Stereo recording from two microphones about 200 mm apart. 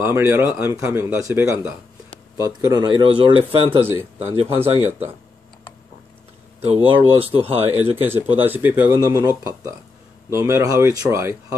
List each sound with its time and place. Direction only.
0.0 s speech: 10° right (ahead or behind); by 4.6 s 30° right (ahead or behind)
6.6 s speech: 30° right (ahead or behind)
8.5 s speech: 10° right (ahead or behind)